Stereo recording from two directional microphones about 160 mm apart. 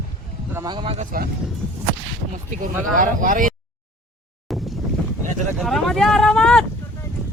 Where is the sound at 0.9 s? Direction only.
60° right (ahead or behind).